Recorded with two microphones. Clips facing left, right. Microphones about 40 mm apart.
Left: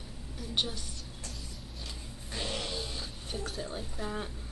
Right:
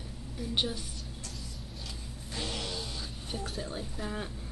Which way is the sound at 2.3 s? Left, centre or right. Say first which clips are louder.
Left 1 dB; centre.